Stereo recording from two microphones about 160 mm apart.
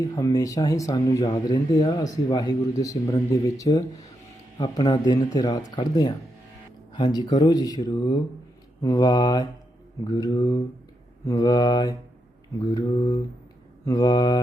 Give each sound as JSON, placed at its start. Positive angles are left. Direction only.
{"t": 0.0, "sound": "speech", "side_deg": 25}